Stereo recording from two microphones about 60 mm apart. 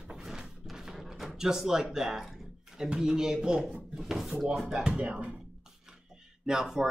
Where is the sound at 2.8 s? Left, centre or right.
Centre.